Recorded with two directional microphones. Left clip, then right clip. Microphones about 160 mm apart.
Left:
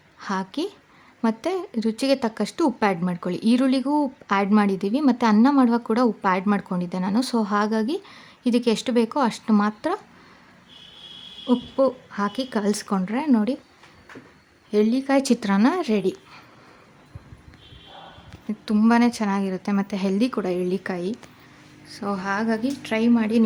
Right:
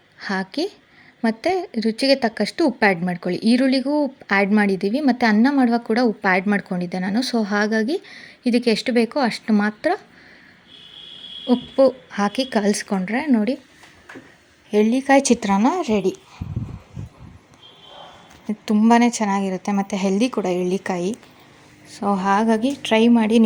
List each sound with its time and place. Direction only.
0.2 s a woman's voice: 5° right (ahead or behind)
11.4 s speech: 10° right (ahead or behind)
13.1 s speech: 5° right (ahead or behind)
14.7 s a woman's voice: 10° right (ahead or behind)
18.9 s a woman's voice: 15° right (ahead or behind)